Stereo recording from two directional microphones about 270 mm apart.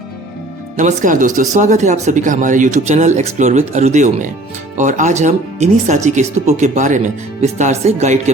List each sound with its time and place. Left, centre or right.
0.8 s speech: right